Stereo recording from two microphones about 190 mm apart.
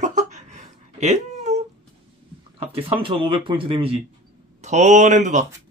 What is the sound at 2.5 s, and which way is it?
Speech, 30° right (ahead or behind).